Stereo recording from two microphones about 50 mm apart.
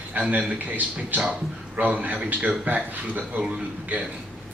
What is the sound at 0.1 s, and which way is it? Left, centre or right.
A man's voice, right.